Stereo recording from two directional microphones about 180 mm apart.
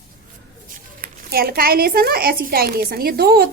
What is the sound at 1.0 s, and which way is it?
A woman's voice, 55° right (ahead or behind).